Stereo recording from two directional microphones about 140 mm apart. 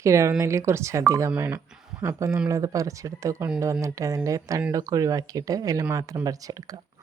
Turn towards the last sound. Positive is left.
turn(degrees=-25)  # may be behind; listen again after turning